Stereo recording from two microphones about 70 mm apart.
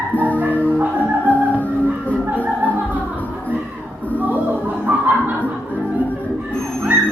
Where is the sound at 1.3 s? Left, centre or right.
Left.